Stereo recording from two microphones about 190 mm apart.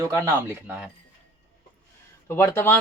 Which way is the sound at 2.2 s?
15° left (ahead or behind).